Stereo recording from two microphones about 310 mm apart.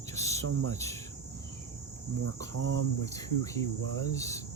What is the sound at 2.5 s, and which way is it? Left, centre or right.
Speech, right.